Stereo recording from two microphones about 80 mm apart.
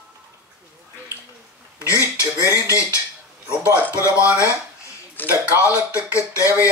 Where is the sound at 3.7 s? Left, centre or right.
Right.